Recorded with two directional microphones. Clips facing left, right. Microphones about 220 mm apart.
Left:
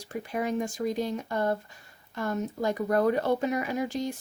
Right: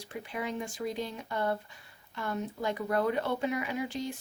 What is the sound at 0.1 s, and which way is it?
Speech, 45° left (ahead or behind).